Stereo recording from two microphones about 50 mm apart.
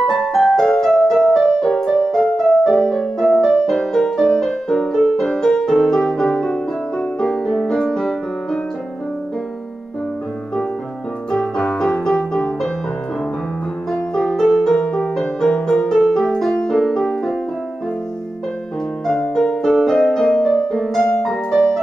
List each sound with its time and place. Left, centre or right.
0.0 s music: centre
11.3 s music: centre
13.9 s music: centre
19.3 s music: centre
19.6 s music: centre